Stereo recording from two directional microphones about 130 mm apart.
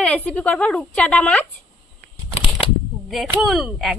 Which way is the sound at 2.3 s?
45° left (ahead or behind).